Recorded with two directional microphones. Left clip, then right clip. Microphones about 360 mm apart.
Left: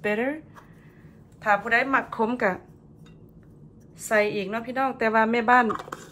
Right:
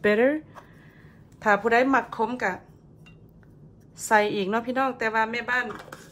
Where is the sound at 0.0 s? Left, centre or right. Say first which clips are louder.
Right 5 dB; right.